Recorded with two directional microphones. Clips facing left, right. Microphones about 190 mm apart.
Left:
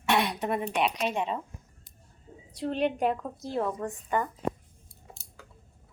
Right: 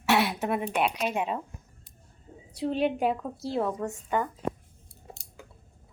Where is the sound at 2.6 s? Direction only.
5° right (ahead or behind).